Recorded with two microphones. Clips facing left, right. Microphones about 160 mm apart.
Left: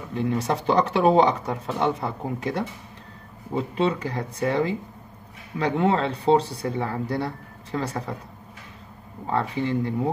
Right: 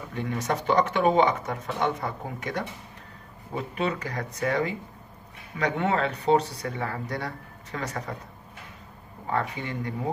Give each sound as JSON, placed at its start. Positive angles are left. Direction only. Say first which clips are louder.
{"t": 0.1, "sound": "speech", "louder": "left 4 dB", "side_deg": 25}
{"t": 9.3, "sound": "speech", "louder": "left 5 dB", "side_deg": 25}